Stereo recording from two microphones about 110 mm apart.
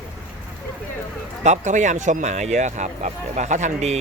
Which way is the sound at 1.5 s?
90° right.